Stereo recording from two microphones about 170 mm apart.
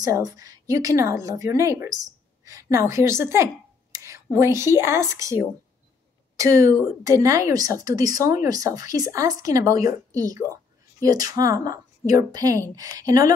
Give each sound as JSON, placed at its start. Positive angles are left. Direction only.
{"t": 0.0, "sound": "a woman's voice", "side_deg": -20}